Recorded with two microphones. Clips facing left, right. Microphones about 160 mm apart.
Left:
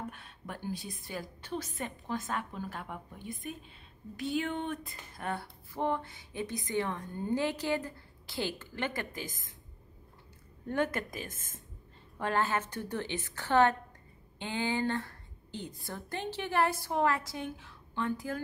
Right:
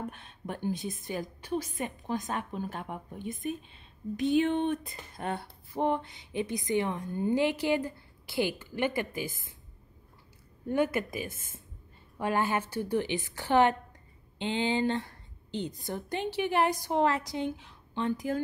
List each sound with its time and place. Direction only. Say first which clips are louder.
0.1 s a woman's voice: right 5 dB; 20° right (ahead or behind)
10.7 s a woman's voice: right 4 dB; 10° right (ahead or behind)